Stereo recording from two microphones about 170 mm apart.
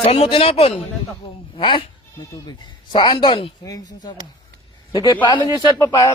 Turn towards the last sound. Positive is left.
turn(degrees=15)  # may be behind; listen again after turning